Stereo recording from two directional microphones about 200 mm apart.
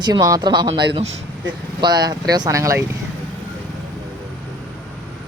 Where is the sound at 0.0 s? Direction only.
20° right (ahead or behind).